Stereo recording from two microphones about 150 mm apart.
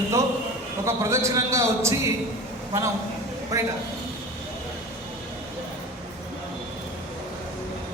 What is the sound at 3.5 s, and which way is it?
Speech, 20° right (ahead or behind).